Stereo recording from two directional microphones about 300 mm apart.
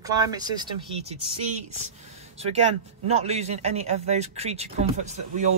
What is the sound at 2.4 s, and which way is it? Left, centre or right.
Speech, right.